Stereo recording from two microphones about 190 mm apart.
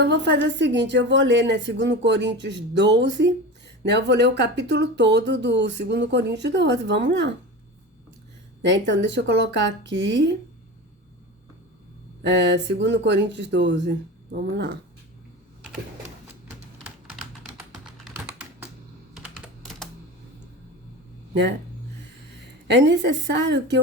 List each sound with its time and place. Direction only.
0.0 s a woman's voice: 65° right (ahead or behind)
8.6 s a woman's voice: 70° right (ahead or behind)
12.2 s a woman's voice: 70° right (ahead or behind)
22.6 s a woman's voice: 65° right (ahead or behind)